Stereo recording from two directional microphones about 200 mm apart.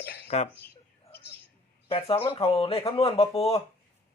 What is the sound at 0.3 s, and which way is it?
Speech, 35° left (ahead or behind).